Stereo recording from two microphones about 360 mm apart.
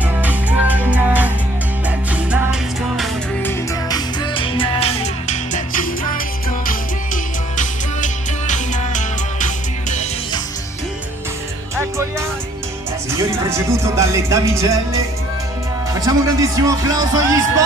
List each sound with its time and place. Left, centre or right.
0.2 s music: centre
3.0 s music: centre
11.7 s music: centre